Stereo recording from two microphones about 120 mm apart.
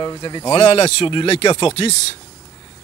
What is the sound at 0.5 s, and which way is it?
A man's voice, 55° left (ahead or behind).